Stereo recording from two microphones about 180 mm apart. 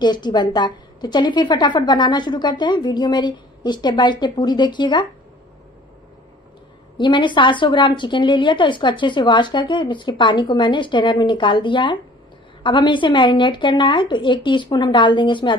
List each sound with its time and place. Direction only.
0.0 s a woman's voice: 25° left (ahead or behind)
7.0 s a woman's voice: 25° left (ahead or behind)